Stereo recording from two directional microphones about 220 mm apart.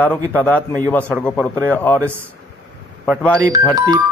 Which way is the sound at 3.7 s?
15° right (ahead or behind).